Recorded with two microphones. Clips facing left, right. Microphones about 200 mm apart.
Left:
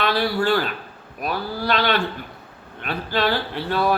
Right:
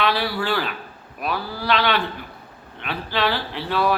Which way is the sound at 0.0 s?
45° left (ahead or behind).